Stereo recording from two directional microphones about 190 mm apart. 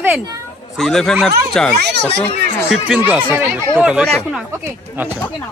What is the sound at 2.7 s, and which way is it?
Speech, 5° right (ahead or behind).